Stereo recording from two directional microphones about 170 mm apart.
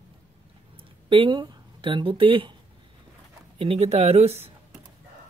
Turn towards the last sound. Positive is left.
turn(degrees=-40)  # may be behind; listen again after turning